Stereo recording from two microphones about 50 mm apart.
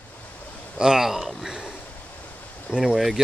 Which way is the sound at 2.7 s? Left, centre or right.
Centre.